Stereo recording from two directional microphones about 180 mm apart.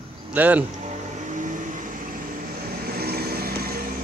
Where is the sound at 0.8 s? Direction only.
45° right (ahead or behind).